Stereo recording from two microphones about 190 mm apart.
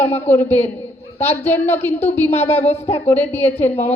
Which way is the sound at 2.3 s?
35° left (ahead or behind).